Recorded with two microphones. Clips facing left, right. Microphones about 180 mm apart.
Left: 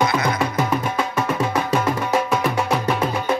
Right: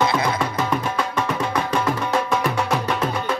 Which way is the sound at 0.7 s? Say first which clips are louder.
Left 1 dB; 10° left (ahead or behind).